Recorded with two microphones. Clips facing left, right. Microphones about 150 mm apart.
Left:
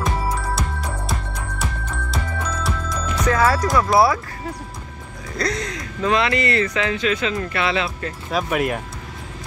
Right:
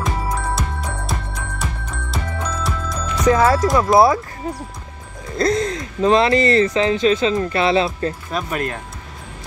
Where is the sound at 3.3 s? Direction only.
20° right (ahead or behind).